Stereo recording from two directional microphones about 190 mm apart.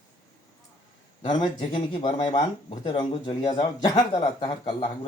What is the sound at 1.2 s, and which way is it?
Speech, 25° left (ahead or behind).